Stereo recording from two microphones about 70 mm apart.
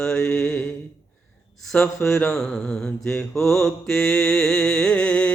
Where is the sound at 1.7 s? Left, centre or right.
Left.